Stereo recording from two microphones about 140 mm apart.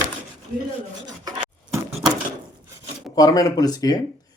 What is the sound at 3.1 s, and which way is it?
Speech, 25° left (ahead or behind).